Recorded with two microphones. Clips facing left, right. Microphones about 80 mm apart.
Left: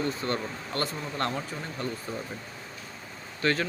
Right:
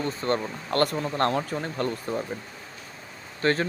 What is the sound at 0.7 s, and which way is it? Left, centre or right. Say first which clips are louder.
A man's voice: right 9 dB; right.